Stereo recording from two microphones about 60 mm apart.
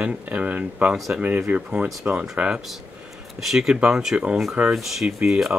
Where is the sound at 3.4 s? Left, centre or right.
Centre.